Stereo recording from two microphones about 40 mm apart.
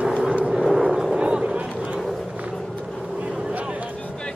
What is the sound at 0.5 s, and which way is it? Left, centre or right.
Vehicle, centre.